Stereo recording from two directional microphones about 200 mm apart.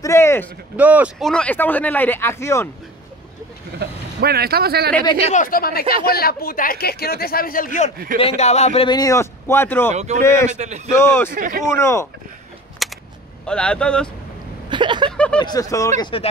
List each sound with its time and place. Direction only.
0.0 s speech: 15° left (ahead or behind)
0.7 s speech: 10° right (ahead or behind); by 2.7 s 15° left (ahead or behind)
3.8 s speech: 55° right (ahead or behind)
5.2 s speech: 40° left (ahead or behind)
8.2 s speech: 30° left (ahead or behind); by 11.3 s 10° left (ahead or behind)
11.3 s speech: 40° right (ahead or behind)
11.6 s speech: 15° left (ahead or behind)
12.8 s a sound: centre (ahead or behind)
13.5 s speech: 5° left (ahead or behind)
14.7 s a sound: 25° right (ahead or behind)
15.0 s speech: 5° left (ahead or behind)
15.3 s speech: 20° left (ahead or behind)